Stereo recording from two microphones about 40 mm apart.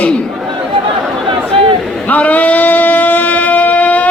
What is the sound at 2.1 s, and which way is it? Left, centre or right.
Shofar, left.